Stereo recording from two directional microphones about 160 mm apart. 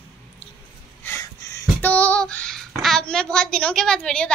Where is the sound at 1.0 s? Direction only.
15° left (ahead or behind).